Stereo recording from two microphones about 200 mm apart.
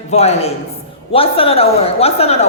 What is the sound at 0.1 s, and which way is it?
A woman's voice, 30° left (ahead or behind).